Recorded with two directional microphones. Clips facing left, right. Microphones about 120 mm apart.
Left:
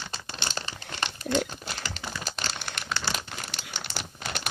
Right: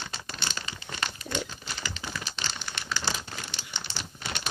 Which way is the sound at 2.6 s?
65° left (ahead or behind).